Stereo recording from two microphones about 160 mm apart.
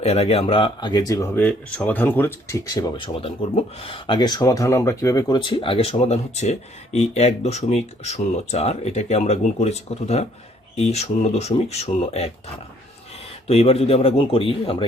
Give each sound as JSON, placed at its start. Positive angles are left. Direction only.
{"t": 0.0, "sound": "speech", "side_deg": 40}
{"t": 3.2, "sound": "speech", "side_deg": 35}
{"t": 13.5, "sound": "speech", "side_deg": 40}